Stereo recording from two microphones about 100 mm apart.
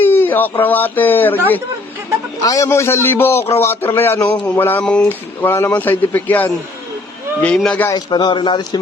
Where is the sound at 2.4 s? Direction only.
35° left (ahead or behind); by 7.8 s 10° left (ahead or behind).